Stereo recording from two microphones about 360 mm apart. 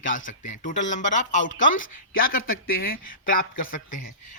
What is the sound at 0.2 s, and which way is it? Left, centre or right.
Speech, left.